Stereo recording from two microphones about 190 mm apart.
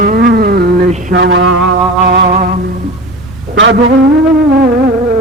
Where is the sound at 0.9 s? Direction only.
40° right (ahead or behind).